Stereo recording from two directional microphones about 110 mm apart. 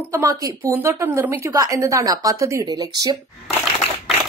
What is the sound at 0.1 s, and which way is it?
A woman's voice, 30° right (ahead or behind).